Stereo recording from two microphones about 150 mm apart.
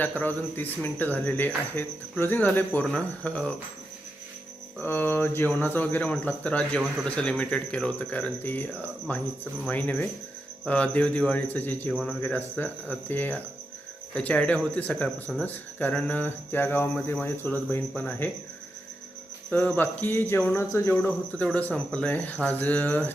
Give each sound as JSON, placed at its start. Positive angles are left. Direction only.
{"t": 0.0, "sound": "speech", "side_deg": 10}
{"t": 4.8, "sound": "speech", "side_deg": 15}
{"t": 19.5, "sound": "speech", "side_deg": 10}